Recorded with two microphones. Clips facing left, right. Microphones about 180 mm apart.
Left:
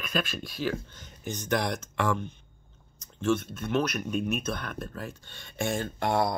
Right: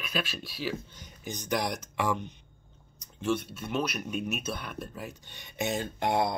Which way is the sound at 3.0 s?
10° right (ahead or behind).